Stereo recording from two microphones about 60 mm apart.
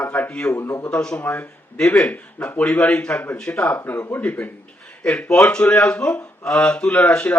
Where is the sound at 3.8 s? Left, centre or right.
Left.